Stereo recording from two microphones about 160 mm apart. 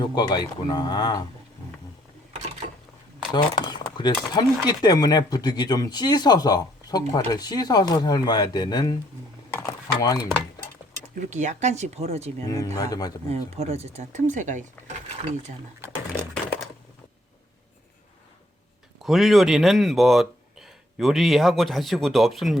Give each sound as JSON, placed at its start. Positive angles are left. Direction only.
{"t": 0.0, "sound": "speech", "side_deg": 25}
{"t": 3.3, "sound": "speech", "side_deg": 25}
{"t": 9.5, "sound": "dishes", "side_deg": 15}
{"t": 11.1, "sound": "speech", "side_deg": -50}
{"t": 12.5, "sound": "speech", "side_deg": 20}
{"t": 13.2, "sound": "speech", "side_deg": -40}
{"t": 19.0, "sound": "speech", "side_deg": 0}